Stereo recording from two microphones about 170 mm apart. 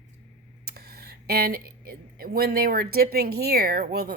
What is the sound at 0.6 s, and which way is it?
Speech, 65° right (ahead or behind).